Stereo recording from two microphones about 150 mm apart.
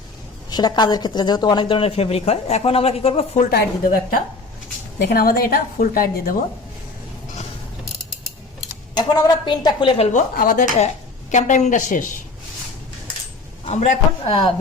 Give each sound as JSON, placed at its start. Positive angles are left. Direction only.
{"t": 0.5, "sound": "speech", "side_deg": 30}
{"t": 3.8, "sound": "a woman's voice", "side_deg": 70}
{"t": 4.9, "sound": "a woman's voice", "side_deg": 85}
{"t": 9.0, "sound": "speech", "side_deg": 30}
{"t": 10.1, "sound": "a woman's voice", "side_deg": 60}
{"t": 13.7, "sound": "a man's voice", "side_deg": 55}